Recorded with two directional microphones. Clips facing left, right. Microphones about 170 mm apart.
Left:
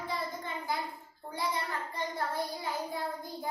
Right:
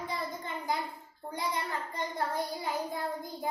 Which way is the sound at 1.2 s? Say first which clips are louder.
Even; 15° right (ahead or behind).